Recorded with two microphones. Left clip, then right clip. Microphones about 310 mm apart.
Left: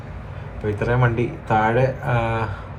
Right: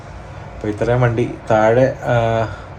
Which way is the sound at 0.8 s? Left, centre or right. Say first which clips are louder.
Right 5 dB; right.